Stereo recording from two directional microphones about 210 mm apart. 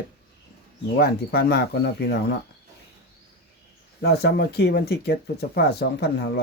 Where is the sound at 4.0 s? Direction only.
50° left (ahead or behind).